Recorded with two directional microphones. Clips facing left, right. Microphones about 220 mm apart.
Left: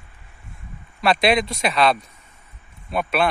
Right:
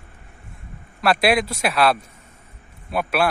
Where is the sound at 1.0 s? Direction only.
5° right (ahead or behind).